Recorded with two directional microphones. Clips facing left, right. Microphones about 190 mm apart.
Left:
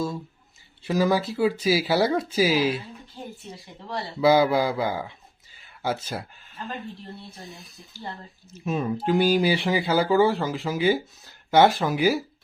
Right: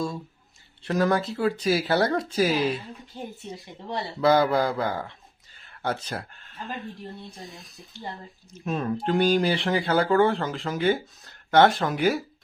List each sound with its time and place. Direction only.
0.8 s speech: 5° left (ahead or behind)
3.1 s speech: 20° right (ahead or behind)
4.2 s speech: 5° left (ahead or behind)
7.9 s speech: 5° left (ahead or behind)